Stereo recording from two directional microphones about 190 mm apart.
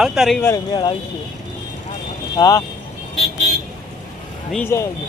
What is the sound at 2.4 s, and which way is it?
Speech, 15° left (ahead or behind).